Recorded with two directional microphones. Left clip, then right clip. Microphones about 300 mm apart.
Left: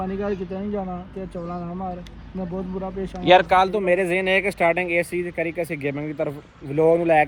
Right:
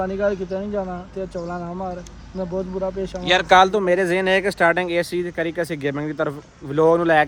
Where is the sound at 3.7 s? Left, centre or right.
Centre.